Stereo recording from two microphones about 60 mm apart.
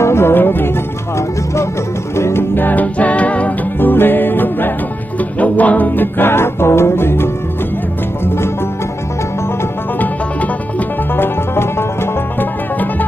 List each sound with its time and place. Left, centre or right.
0.0 s music: left
1.1 s speech: left
2.1 s music: left
2.5 s music: left
3.9 s music: left
11.1 s music: left